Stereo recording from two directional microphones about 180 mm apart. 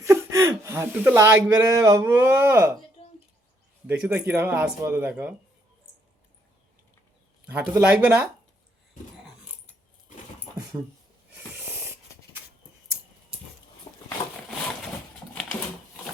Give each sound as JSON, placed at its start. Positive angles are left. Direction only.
{"t": 0.0, "sound": "speech", "side_deg": -15}
{"t": 3.8, "sound": "speech", "side_deg": -10}
{"t": 7.4, "sound": "speech", "side_deg": -10}
{"t": 13.9, "sound": "a sound", "side_deg": 30}